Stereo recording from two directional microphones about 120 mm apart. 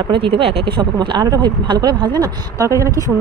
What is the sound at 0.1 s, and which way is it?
Speech, 50° right (ahead or behind).